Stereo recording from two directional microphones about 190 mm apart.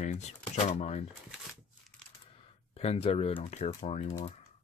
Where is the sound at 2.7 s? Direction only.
30° left (ahead or behind).